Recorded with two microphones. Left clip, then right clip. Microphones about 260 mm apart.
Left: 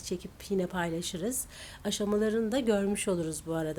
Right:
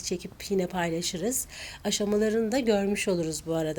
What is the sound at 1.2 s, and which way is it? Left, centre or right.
Speech, left.